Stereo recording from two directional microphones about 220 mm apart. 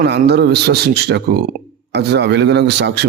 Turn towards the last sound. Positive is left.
turn(degrees=-50)  # may be behind; listen again after turning